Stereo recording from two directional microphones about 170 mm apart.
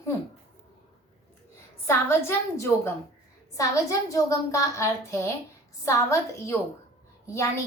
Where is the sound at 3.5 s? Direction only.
20° left (ahead or behind).